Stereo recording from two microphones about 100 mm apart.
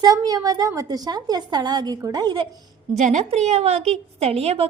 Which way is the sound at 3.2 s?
90° right.